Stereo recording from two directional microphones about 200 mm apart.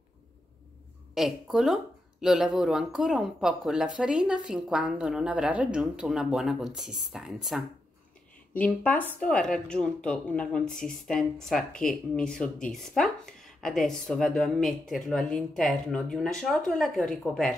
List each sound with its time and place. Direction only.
1.1 s speech: centre (ahead or behind)